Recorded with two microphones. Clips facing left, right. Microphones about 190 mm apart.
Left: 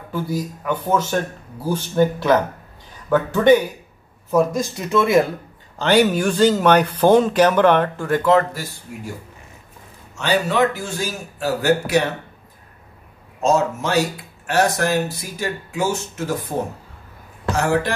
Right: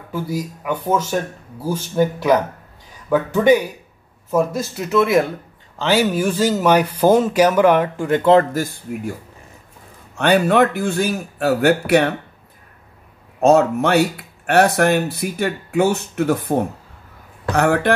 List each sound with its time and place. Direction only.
0.1 s speech: 10° right (ahead or behind)
8.1 s speech: 25° right (ahead or behind)
8.5 s speech: 55° right (ahead or behind)
10.1 s speech: 55° right (ahead or behind)
13.4 s speech: 60° right (ahead or behind)